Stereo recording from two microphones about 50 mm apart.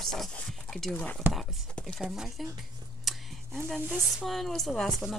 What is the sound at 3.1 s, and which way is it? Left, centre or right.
Whispering, centre.